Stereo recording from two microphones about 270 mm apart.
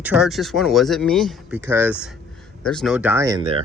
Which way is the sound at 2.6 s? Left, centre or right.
Centre.